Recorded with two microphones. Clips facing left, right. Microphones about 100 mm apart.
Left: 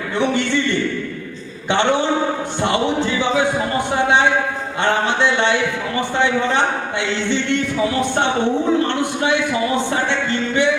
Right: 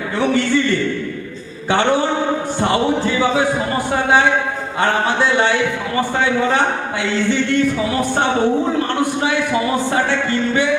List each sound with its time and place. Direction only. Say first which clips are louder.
0.2 s music: right 2 dB; 20° left (ahead or behind)
5.0 s music: right 1 dB; 20° left (ahead or behind)
7.3 s music: right 3 dB; 20° left (ahead or behind)
9.0 s music: right 1 dB; 20° left (ahead or behind)